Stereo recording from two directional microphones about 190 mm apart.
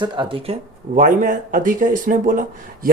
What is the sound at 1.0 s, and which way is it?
Speech, 45° right (ahead or behind).